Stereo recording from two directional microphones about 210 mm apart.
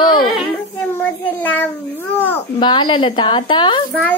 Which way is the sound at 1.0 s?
5° left (ahead or behind).